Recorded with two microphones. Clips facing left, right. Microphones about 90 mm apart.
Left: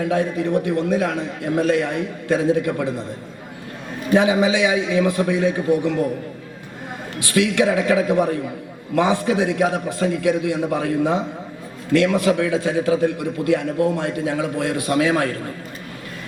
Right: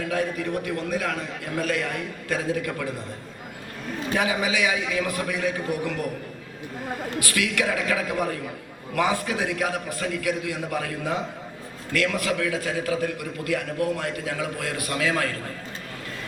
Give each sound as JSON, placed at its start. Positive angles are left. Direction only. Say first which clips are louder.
{"t": 0.1, "sound": "a man's voice", "louder": "left 5 dB", "side_deg": 25}
{"t": 4.1, "sound": "a man's voice", "louder": "left 9 dB", "side_deg": 25}
{"t": 7.2, "sound": "a man's voice", "louder": "left 9 dB", "side_deg": 25}